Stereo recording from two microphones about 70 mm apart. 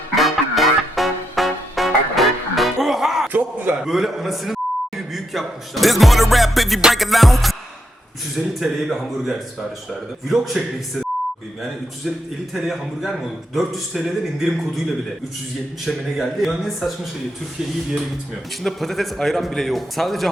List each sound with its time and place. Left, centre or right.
0.2 s music: centre
3.3 s a sound: right
3.8 s a man's voice: centre
12.5 s a man's voice: centre
15.9 s a man's voice: centre
18.6 s a man's voice: centre